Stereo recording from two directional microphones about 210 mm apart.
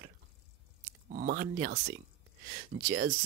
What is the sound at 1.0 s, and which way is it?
Speech, 40° right (ahead or behind).